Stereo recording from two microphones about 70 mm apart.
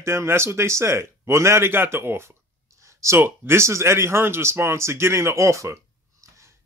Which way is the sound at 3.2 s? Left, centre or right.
Right.